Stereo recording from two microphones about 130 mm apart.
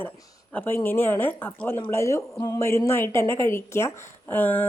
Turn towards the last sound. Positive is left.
turn(degrees=15)  # may be behind; listen again after turning